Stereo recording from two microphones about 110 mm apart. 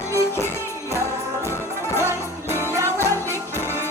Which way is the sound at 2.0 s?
20° right (ahead or behind).